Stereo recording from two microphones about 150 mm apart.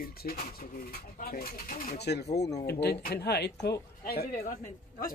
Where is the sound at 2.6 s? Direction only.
90° left.